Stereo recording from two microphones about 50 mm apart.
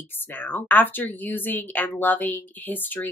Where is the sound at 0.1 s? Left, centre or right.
Left.